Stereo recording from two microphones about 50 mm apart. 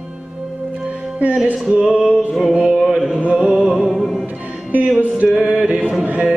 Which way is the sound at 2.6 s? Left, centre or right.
Centre.